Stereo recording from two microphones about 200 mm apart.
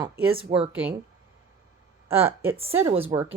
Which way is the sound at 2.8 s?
25° right (ahead or behind).